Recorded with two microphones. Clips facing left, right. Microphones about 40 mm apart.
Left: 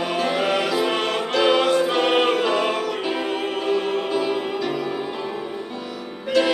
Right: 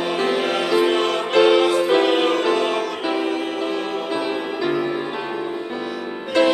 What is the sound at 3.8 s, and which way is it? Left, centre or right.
Music, right.